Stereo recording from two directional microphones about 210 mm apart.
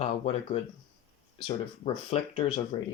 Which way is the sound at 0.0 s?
25° left (ahead or behind).